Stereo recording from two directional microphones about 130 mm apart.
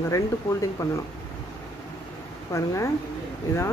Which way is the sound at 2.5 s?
25° left (ahead or behind).